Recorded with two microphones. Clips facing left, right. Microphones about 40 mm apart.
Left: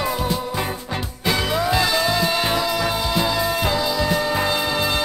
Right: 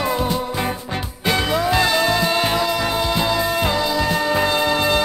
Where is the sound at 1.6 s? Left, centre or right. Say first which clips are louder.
Right 2 dB; right.